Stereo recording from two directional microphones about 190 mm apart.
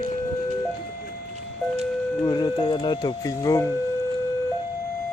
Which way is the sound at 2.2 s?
20° left (ahead or behind).